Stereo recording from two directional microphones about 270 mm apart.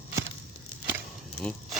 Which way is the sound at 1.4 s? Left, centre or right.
Centre.